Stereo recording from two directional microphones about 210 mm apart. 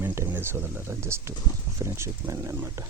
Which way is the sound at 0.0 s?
10° right (ahead or behind).